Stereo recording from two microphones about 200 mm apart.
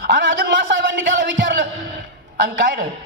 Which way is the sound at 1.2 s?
45° right (ahead or behind).